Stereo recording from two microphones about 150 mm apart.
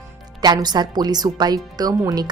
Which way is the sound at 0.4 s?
30° right (ahead or behind).